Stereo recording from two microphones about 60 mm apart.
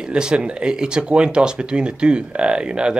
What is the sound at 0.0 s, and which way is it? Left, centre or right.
Speech, centre.